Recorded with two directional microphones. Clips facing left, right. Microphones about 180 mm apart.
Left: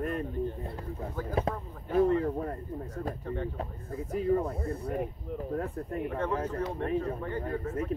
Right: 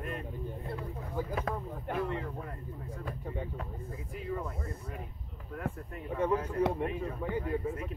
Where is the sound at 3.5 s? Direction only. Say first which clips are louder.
Left 4 dB; 35° left (ahead or behind).